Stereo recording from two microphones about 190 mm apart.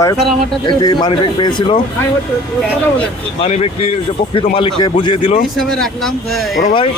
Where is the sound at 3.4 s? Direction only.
30° left (ahead or behind).